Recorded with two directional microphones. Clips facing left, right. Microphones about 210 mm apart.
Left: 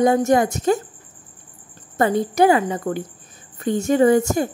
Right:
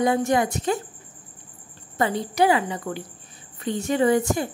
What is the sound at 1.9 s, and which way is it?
A woman's voice, 50° left (ahead or behind).